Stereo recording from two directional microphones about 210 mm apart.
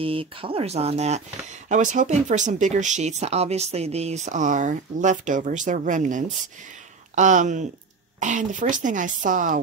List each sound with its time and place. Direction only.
0.0 s speech: 25° right (ahead or behind)